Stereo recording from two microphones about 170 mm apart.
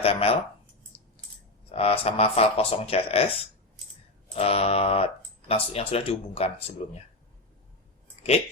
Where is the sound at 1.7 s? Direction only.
35° left (ahead or behind).